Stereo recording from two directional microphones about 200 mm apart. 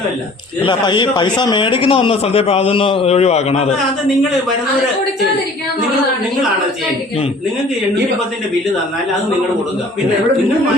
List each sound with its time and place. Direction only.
0.6 s speech: 25° left (ahead or behind)